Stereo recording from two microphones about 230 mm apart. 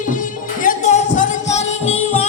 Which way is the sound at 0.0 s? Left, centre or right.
Left.